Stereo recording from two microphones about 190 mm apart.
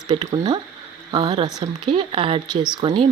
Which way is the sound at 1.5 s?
25° right (ahead or behind).